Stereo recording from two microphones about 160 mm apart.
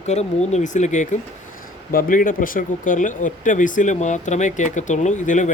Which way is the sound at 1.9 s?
60° left (ahead or behind).